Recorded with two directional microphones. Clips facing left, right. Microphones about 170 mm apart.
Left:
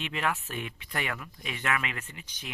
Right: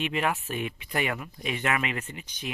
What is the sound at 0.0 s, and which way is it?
Speech, 15° right (ahead or behind).